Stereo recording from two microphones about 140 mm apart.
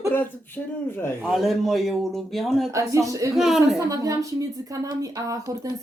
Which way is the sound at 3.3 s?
5° right (ahead or behind).